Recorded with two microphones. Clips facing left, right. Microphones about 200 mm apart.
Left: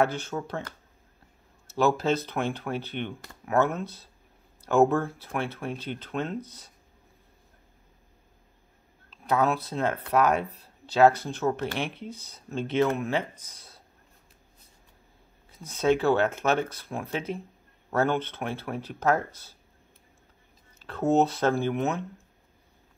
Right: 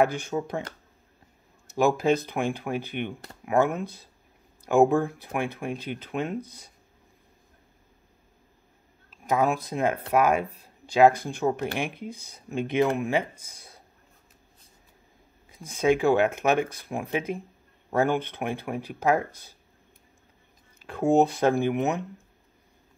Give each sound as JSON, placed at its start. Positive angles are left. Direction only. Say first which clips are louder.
{"t": 0.0, "sound": "speech", "louder": "right 2 dB", "side_deg": -15}
{"t": 1.7, "sound": "speech", "louder": "right 2 dB", "side_deg": -15}
{"t": 9.1, "sound": "speech", "louder": "right 1 dB", "side_deg": -10}
{"t": 15.5, "sound": "speech", "louder": "right 1 dB", "side_deg": -10}
{"t": 20.8, "sound": "speech", "louder": "right 2 dB", "side_deg": -10}